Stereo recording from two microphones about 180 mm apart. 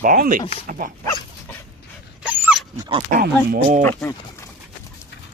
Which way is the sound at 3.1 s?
60° right (ahead or behind).